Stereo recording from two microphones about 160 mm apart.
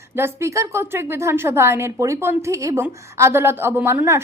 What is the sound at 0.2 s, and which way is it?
Speech, 15° right (ahead or behind).